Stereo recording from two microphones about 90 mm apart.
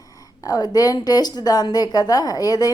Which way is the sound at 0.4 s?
45° left (ahead or behind).